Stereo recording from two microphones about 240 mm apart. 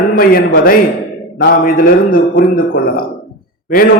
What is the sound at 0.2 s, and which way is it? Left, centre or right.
A man's voice, left.